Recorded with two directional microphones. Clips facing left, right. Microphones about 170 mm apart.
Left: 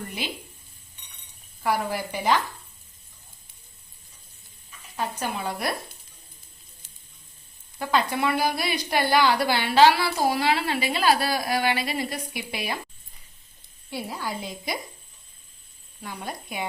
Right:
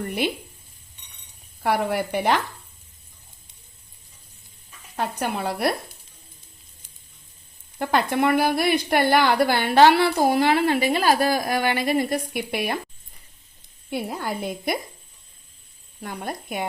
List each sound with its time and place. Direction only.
1.6 s a woman's voice: 65° right (ahead or behind)
4.9 s a woman's voice: 65° right (ahead or behind)
7.8 s a woman's voice: 55° right (ahead or behind)
13.9 s a woman's voice: 55° right (ahead or behind)
16.0 s a woman's voice: 50° right (ahead or behind)